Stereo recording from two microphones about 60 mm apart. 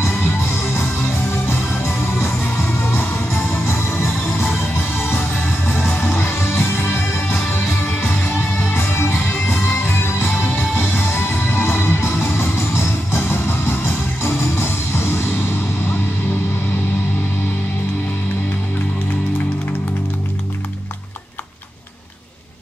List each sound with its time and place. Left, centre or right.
0.0 s music: left
3.6 s music: left
5.8 s music: left
8.7 s music: left